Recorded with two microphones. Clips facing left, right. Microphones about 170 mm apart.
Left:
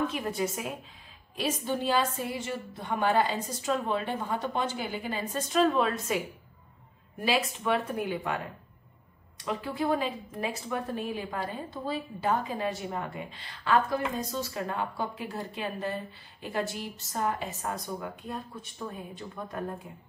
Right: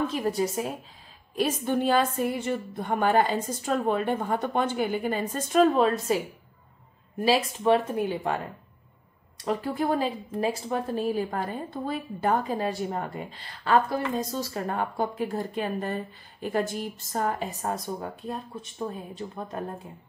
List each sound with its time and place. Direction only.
0.1 s a woman's voice: 35° right (ahead or behind)
1.3 s a woman's voice: 50° right (ahead or behind)
5.7 s a woman's voice: 35° right (ahead or behind)
7.2 s speech: 30° right (ahead or behind)
9.4 s a woman's voice: 40° right (ahead or behind)
12.5 s a woman's voice: 40° right (ahead or behind)